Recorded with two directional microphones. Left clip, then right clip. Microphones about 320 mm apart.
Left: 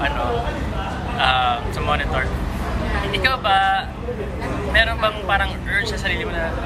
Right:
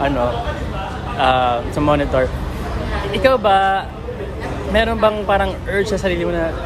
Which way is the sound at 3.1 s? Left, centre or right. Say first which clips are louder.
Right 5 dB; right.